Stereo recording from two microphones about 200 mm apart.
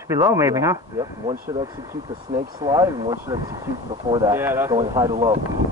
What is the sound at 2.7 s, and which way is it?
Speech, 20° right (ahead or behind).